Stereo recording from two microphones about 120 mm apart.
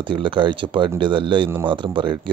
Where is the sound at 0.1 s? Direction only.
40° right (ahead or behind).